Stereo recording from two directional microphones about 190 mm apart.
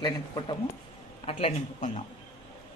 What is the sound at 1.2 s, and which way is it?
Speech, 35° left (ahead or behind).